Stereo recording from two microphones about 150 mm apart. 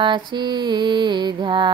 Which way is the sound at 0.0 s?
30° right (ahead or behind).